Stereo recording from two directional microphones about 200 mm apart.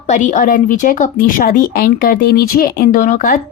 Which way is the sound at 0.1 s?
40° left (ahead or behind).